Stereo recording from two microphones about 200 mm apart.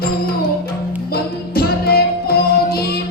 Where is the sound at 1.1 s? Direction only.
50° left (ahead or behind).